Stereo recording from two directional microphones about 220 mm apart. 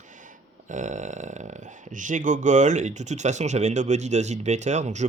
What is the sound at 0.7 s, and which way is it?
Speech, 35° right (ahead or behind).